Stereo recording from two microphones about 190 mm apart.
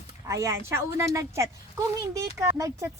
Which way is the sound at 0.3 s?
15° right (ahead or behind).